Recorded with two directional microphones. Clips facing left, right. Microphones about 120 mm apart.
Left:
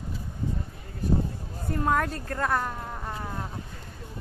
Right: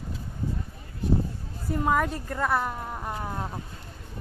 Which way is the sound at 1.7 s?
5° right (ahead or behind).